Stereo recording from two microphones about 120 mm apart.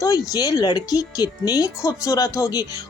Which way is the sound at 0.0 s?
30° left (ahead or behind).